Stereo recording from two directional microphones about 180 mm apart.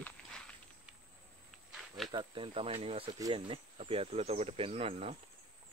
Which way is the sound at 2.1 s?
25° right (ahead or behind).